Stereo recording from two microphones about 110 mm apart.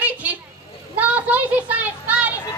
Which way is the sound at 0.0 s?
15° right (ahead or behind).